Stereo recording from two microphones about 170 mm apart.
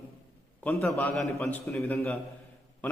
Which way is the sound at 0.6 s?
10° left (ahead or behind).